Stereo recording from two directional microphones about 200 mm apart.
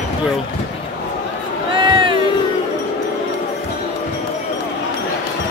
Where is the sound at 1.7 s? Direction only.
25° right (ahead or behind).